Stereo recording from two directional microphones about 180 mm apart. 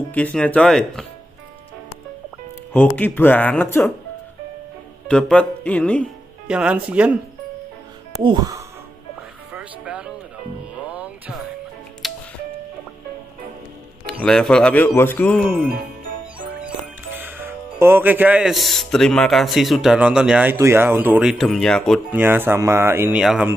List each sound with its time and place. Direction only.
0.1 s speech: 5° left (ahead or behind)
2.7 s speech: 10° left (ahead or behind)
5.0 s speech: 5° left (ahead or behind)
6.4 s speech: 5° right (ahead or behind)
8.2 s speech: 25° right (ahead or behind)
9.5 s music: 5° right (ahead or behind)
14.2 s speech: 5° left (ahead or behind)
16.3 s speech: 10° right (ahead or behind)
22.1 s speech: 10° right (ahead or behind)